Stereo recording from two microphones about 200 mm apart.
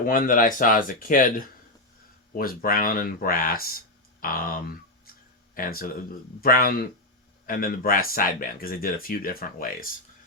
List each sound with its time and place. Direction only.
0.0 s speech: 45° left (ahead or behind)